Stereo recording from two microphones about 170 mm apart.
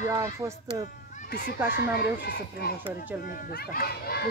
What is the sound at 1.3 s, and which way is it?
Speech, 75° left (ahead or behind).